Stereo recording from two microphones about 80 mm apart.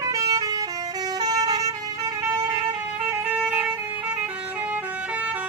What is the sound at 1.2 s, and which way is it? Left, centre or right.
Vehicle horn, right.